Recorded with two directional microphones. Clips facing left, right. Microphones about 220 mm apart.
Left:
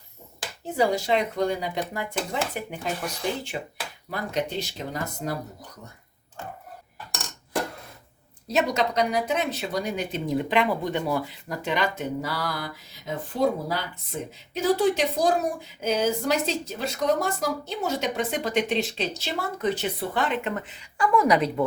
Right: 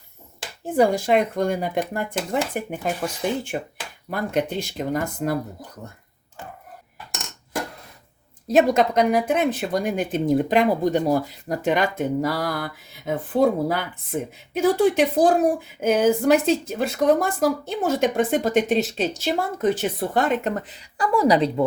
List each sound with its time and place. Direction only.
0.6 s a woman's voice: 50° right (ahead or behind)
8.4 s a woman's voice: 50° right (ahead or behind); by 21.5 s 30° right (ahead or behind)